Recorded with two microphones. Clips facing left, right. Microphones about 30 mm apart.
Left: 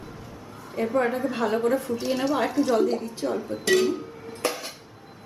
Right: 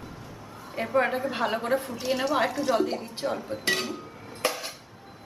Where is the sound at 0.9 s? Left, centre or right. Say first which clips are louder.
Even; centre.